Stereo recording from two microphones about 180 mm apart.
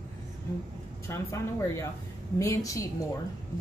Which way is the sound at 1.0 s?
15° left (ahead or behind).